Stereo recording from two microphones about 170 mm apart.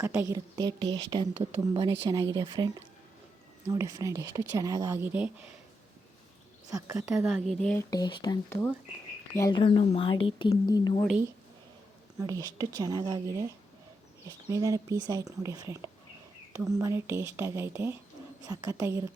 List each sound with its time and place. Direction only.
0.0 s speech: 15° right (ahead or behind)
6.7 s speech: 20° right (ahead or behind)
7.3 s a woman's voice: centre (ahead or behind)
7.8 s speech: 20° left (ahead or behind)
9.6 s speech: 30° left (ahead or behind)
12.2 s speech: 20° right (ahead or behind)